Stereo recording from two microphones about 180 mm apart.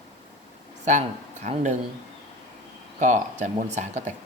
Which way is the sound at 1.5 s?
45° right (ahead or behind).